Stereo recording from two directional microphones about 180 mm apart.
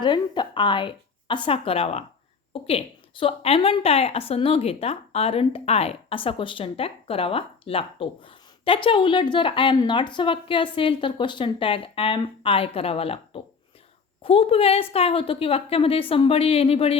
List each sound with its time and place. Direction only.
0.0 s a woman's voice: 25° left (ahead or behind)